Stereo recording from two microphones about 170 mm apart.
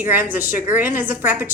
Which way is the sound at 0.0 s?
10° right (ahead or behind).